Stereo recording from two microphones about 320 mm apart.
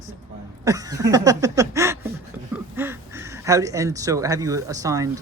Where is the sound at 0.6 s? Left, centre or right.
Centre.